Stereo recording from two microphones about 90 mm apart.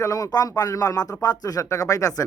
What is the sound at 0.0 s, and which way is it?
Speech, 40° left (ahead or behind).